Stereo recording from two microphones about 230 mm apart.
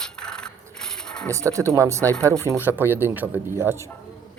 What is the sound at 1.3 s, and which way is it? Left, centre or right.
Speech, centre.